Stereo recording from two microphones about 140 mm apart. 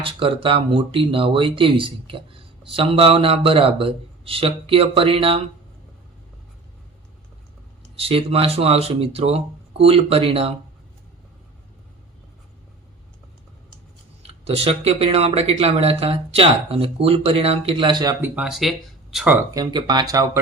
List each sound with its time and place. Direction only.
0.0 s speech: 40° right (ahead or behind)
7.9 s speech: 40° right (ahead or behind)
14.2 s speech: 45° right (ahead or behind); by 18.2 s 30° right (ahead or behind)
18.2 s speech: 5° right (ahead or behind)
19.5 s speech: 30° right (ahead or behind)